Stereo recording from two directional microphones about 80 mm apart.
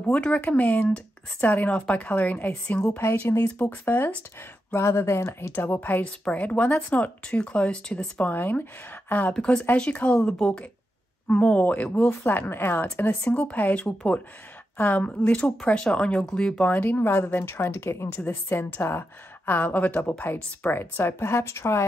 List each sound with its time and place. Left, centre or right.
0.0 s a woman's voice: centre
3.0 s a woman's voice: left
9.3 s a woman's voice: centre
16.7 s a woman's voice: left